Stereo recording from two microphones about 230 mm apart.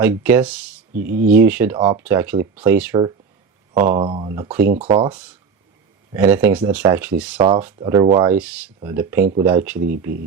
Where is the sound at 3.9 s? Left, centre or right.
Right.